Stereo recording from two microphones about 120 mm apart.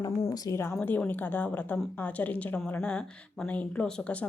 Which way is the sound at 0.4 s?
20° left (ahead or behind).